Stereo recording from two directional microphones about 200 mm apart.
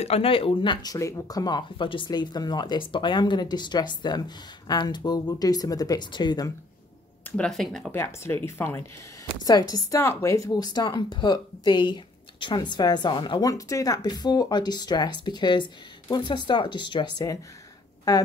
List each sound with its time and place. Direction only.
0.0 s speech: 30° left (ahead or behind)
7.2 s speech: 5° left (ahead or behind)
7.9 s speech: 10° left (ahead or behind)